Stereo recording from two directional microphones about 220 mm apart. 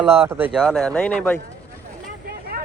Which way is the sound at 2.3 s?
45° right (ahead or behind).